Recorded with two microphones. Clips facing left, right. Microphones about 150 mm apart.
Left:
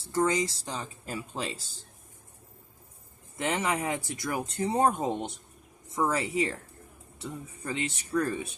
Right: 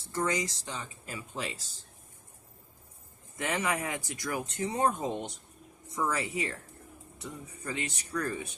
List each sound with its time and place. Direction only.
0.1 s speech: 30° left (ahead or behind)
3.4 s speech: 30° left (ahead or behind)